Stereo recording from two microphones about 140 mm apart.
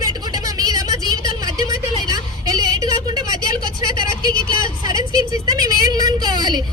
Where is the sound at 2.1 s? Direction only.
25° right (ahead or behind).